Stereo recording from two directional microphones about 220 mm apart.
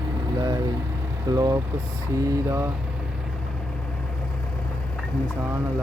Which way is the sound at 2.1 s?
15° right (ahead or behind).